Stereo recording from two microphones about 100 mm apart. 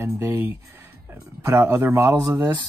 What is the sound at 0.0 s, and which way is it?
A man's voice, 20° right (ahead or behind).